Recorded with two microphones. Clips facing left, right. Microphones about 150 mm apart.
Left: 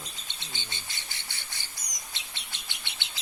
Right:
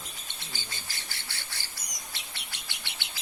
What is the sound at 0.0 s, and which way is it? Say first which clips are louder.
Bird: even; 20° left (ahead or behind).